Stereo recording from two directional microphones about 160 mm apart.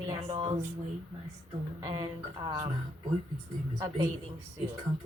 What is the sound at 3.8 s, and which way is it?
Speech, 25° right (ahead or behind).